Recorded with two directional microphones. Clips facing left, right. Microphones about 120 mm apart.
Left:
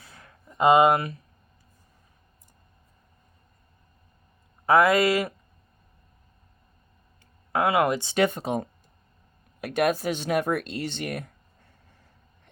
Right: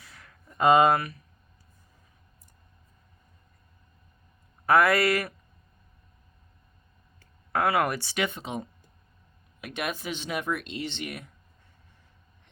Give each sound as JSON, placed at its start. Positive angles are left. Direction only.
{"t": 0.0, "sound": "a sound", "side_deg": 30}
{"t": 0.4, "sound": "speech", "side_deg": 20}
{"t": 4.6, "sound": "speech", "side_deg": 25}
{"t": 7.5, "sound": "speech", "side_deg": 20}
{"t": 8.1, "sound": "speech", "side_deg": 40}